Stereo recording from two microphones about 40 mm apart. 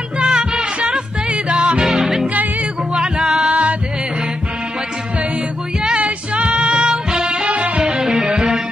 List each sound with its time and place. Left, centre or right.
0.2 s music: right
1.8 s music: centre
3.4 s music: right
5.8 s music: right
7.4 s music: right
7.8 s music: centre